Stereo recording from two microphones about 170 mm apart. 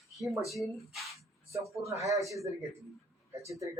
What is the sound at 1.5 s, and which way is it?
Speech, 20° right (ahead or behind).